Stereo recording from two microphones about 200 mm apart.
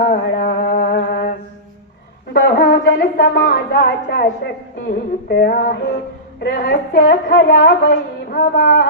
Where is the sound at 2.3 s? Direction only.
55° left (ahead or behind).